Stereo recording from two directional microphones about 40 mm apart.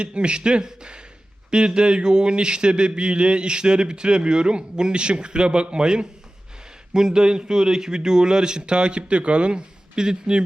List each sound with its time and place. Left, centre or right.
0.0 s speech: right